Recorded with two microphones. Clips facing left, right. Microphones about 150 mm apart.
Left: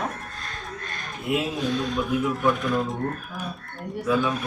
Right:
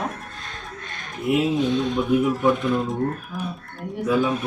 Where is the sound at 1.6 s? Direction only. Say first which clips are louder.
Right 4 dB; 25° right (ahead or behind).